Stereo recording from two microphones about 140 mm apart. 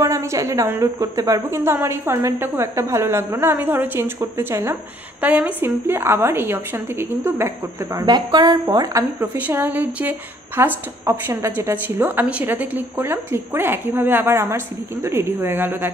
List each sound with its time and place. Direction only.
0.0 s a woman's voice: 20° right (ahead or behind)